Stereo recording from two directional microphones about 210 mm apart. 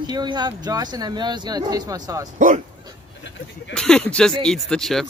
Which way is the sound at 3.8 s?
5° left (ahead or behind).